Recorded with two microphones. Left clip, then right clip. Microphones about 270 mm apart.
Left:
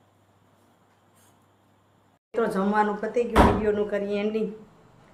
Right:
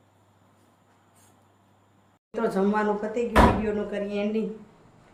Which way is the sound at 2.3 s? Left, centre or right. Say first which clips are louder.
Left 1 dB; centre.